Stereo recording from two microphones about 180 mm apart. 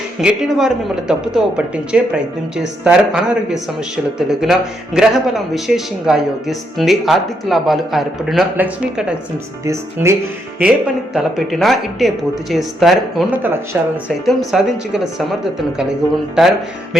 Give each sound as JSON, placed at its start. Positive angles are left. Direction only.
{"t": 0.2, "sound": "speech", "side_deg": -5}
{"t": 10.6, "sound": "speech", "side_deg": -5}